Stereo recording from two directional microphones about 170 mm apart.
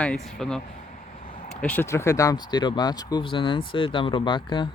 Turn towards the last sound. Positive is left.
turn(degrees=25)  # may be behind; listen again after turning